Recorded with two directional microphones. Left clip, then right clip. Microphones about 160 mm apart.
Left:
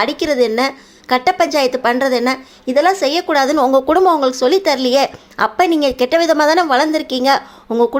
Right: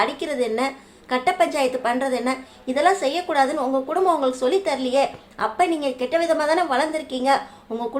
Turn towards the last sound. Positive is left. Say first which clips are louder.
# left 9 dB
turn(degrees=40)  # may be behind; listen again after turning